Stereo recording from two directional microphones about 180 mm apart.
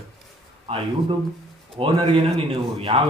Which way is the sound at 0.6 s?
30° right (ahead or behind).